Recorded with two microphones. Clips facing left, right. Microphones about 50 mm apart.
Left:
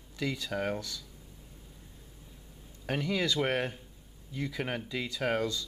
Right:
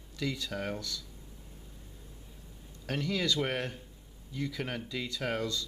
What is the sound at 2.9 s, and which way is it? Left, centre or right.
Speech, centre.